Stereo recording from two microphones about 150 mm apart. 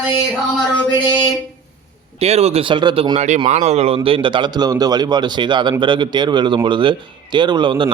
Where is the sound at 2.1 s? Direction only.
45° right (ahead or behind).